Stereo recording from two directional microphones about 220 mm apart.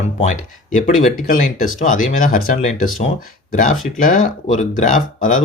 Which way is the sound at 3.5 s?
35° left (ahead or behind).